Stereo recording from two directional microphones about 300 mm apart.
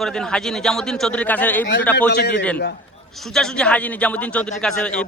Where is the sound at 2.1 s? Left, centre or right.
Left.